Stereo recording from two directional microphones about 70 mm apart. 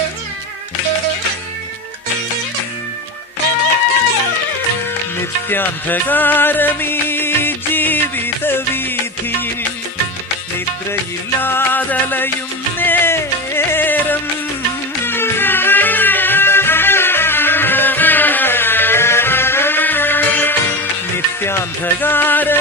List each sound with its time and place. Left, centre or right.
5.5 s music: left
11.3 s music: left
22.0 s music: left